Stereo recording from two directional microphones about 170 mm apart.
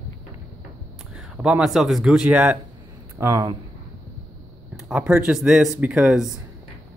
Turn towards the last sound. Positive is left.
turn(degrees=-5)  # may be behind; listen again after turning